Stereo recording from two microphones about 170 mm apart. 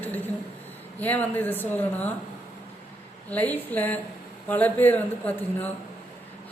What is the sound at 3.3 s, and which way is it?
Speech, 10° left (ahead or behind).